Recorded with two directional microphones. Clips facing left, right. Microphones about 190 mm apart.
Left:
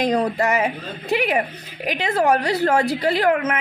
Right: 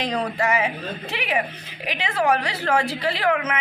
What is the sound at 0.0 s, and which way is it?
A woman's voice, 45° left (ahead or behind).